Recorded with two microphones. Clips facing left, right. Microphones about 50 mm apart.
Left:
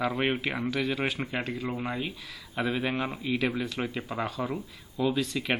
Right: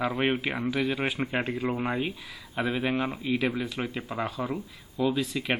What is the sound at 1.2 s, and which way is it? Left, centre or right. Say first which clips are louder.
Speech: right 3 dB; right.